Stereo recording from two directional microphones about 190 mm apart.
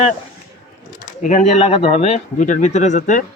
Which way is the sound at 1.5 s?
35° left (ahead or behind).